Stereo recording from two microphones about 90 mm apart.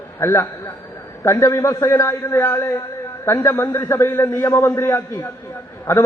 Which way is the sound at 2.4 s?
30° left (ahead or behind).